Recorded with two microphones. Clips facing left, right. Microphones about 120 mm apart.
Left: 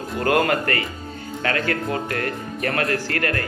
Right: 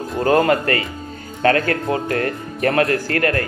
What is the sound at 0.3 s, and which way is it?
A man's voice, 35° right (ahead or behind).